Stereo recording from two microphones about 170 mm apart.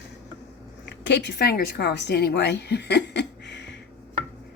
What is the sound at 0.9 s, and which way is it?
A woman's voice, 90° left.